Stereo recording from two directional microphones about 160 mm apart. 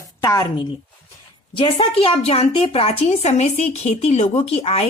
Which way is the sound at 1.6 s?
35° left (ahead or behind).